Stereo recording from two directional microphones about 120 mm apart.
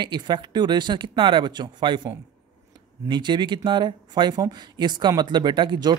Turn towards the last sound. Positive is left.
turn(degrees=-35)  # may be behind; listen again after turning